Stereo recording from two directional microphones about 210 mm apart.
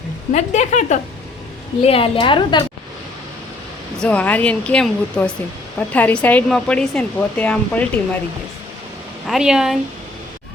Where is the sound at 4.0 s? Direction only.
5° left (ahead or behind).